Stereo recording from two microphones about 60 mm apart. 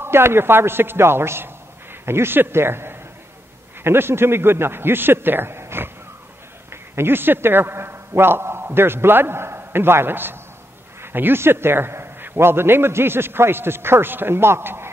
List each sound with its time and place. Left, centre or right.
0.0 s a man's voice: right